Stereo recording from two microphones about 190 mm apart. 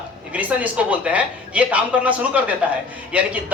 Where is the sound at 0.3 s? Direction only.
10° right (ahead or behind).